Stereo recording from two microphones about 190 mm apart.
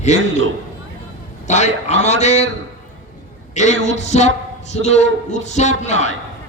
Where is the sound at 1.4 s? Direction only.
40° left (ahead or behind).